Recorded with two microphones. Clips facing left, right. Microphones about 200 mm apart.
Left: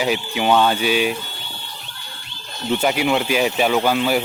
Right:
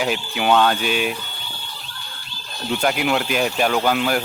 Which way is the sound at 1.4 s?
20° left (ahead or behind).